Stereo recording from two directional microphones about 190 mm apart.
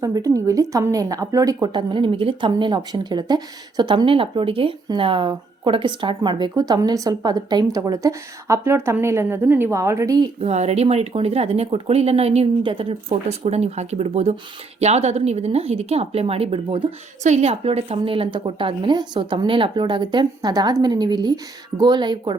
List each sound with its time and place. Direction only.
0.0 s a woman's voice: 15° right (ahead or behind)
10.4 s a woman's voice: 35° right (ahead or behind)